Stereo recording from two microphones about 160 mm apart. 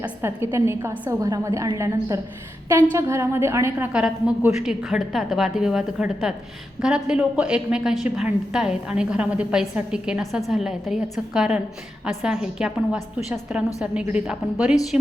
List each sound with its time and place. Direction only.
0.0 s a woman's voice: 15° right (ahead or behind)